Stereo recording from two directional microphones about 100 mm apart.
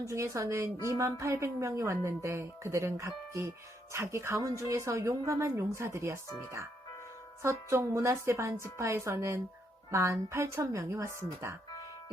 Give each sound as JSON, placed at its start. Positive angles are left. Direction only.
{"t": 0.0, "sound": "a woman's voice", "side_deg": -30}